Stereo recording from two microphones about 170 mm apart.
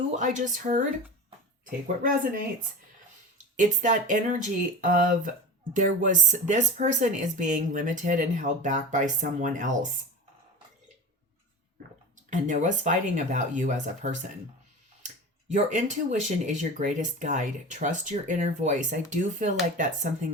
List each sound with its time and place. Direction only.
0.1 s speech: 45° right (ahead or behind)
2.0 s speech: 55° right (ahead or behind)
12.3 s speech: 45° right (ahead or behind)
15.5 s speech: 45° right (ahead or behind)